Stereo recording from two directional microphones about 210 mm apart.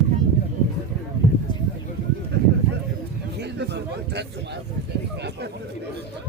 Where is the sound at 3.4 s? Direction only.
55° right (ahead or behind).